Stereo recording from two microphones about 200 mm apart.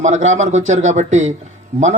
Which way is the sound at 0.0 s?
35° right (ahead or behind).